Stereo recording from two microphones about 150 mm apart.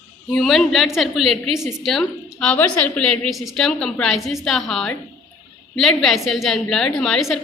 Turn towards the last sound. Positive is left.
turn(degrees=5)  # may be behind; listen again after turning